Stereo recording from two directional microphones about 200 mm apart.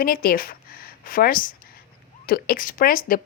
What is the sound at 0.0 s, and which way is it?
A woman's voice, 45° left (ahead or behind).